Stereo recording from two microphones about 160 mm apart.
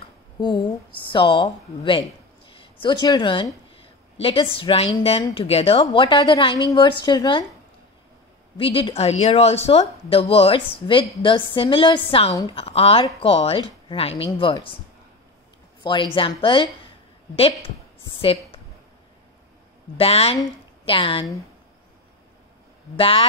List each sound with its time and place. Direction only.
0.4 s a woman's voice: 30° left (ahead or behind)
8.5 s a woman's voice: 35° left (ahead or behind)
15.8 s a woman's voice: 30° left (ahead or behind)
18.2 s a woman's voice: 35° left (ahead or behind)
20.0 s a woman's voice: 40° left (ahead or behind)
22.9 s a woman's voice: 35° left (ahead or behind)